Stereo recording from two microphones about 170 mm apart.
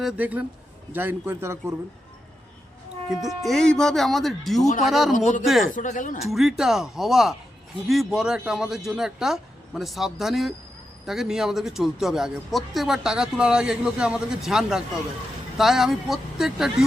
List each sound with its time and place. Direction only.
0.0 s a man's voice: 5° right (ahead or behind)
3.1 s speech: centre (ahead or behind)
5.7 s speech: 50° left (ahead or behind)
6.3 s speech: centre (ahead or behind)